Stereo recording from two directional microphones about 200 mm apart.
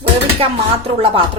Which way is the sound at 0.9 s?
25° right (ahead or behind).